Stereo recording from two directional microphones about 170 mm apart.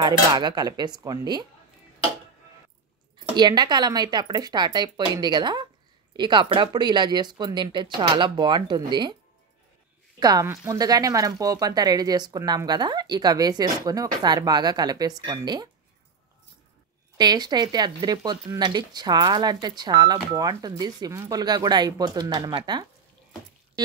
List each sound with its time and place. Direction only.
0.0 s speech: 25° right (ahead or behind)
3.3 s speech: 25° right (ahead or behind)
10.2 s speech: 20° right (ahead or behind)
17.2 s speech: 25° right (ahead or behind)